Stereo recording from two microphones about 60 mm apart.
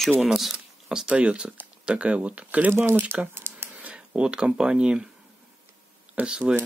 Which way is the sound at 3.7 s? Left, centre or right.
Right.